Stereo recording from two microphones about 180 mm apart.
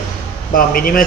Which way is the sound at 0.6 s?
55° left (ahead or behind).